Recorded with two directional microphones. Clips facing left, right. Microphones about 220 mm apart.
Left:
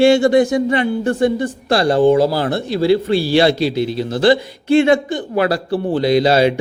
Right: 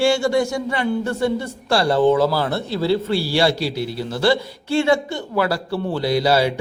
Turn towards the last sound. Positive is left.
turn(degrees=20)  # may be behind; listen again after turning